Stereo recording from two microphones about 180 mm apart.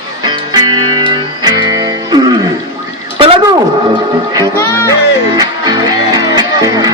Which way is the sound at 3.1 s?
30° right (ahead or behind).